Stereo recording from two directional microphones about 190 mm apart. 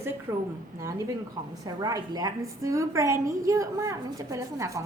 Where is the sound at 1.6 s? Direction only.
20° right (ahead or behind).